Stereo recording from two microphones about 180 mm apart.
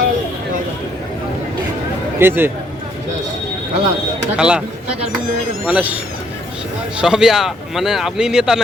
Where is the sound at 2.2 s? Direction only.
10° right (ahead or behind).